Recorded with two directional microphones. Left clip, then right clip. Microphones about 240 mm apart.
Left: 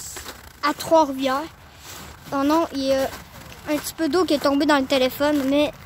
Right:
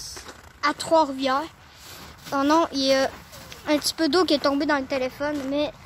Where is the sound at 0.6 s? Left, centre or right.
Centre.